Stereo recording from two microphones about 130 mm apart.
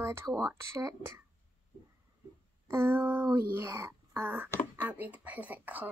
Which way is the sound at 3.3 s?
20° right (ahead or behind).